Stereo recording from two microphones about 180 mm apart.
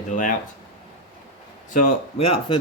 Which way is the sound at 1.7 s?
40° left (ahead or behind).